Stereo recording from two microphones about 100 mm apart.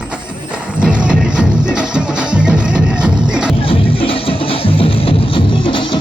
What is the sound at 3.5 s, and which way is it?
Music, 65° left (ahead or behind).